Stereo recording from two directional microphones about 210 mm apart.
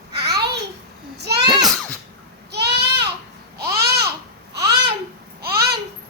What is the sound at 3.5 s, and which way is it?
Babbling, 50° right (ahead or behind).